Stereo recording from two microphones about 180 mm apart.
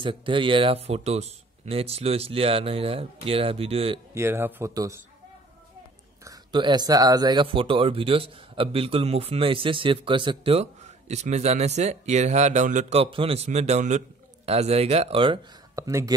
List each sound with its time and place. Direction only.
0.0 s speech: 30° right (ahead or behind)
4.1 s speech: 15° right (ahead or behind)
6.2 s speech: 20° right (ahead or behind)
15.7 s speech: 15° right (ahead or behind)